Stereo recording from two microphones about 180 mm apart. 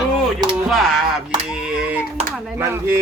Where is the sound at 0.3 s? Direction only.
Centre (ahead or behind).